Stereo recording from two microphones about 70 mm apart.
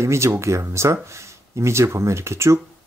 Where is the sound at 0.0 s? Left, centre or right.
Right.